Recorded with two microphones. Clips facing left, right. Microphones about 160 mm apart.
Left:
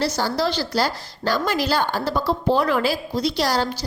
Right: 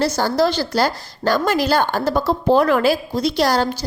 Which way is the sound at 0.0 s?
50° right (ahead or behind).